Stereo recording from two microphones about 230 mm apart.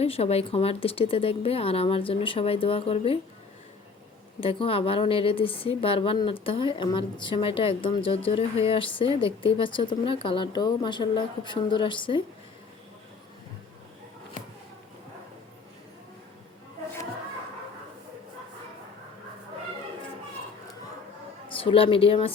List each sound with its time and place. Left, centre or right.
0.0 s a woman's voice: left
4.4 s a woman's voice: left
21.5 s speech: left